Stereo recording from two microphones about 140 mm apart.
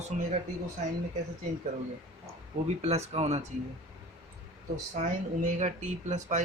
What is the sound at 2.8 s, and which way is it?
Speech, 50° right (ahead or behind).